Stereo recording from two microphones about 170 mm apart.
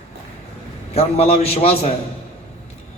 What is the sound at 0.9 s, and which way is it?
Speech, 35° left (ahead or behind).